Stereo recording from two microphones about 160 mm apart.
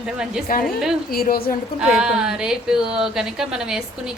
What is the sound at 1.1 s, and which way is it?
Speech, 70° left (ahead or behind).